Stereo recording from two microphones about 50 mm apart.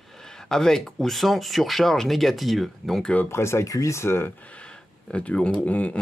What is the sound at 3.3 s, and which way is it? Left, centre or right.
Speech, left.